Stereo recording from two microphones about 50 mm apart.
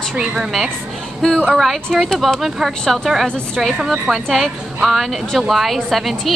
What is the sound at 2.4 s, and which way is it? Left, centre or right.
A woman's voice, centre.